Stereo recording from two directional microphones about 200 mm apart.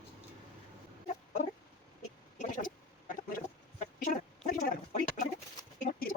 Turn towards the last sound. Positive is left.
turn(degrees=45)  # may be behind; listen again after turning